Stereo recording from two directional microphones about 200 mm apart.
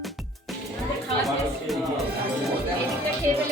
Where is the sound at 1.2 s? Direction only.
Centre (ahead or behind).